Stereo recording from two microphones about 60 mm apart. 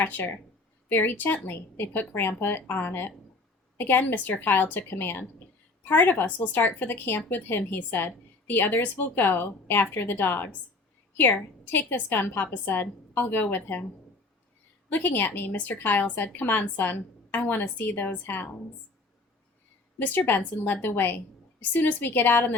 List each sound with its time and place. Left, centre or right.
0.0 s a woman's voice: left
11.6 s a woman's voice: left
14.8 s a woman's voice: left
20.0 s a woman's voice: left